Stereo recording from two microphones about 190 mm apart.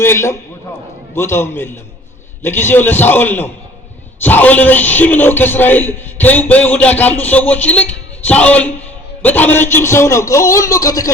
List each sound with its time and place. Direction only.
0.0 s a man's voice: 15° left (ahead or behind)